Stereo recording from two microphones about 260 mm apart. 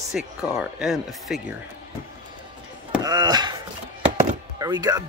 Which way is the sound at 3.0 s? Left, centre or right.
Centre.